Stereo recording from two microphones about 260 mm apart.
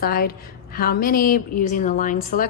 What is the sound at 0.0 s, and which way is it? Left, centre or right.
A woman's voice, left.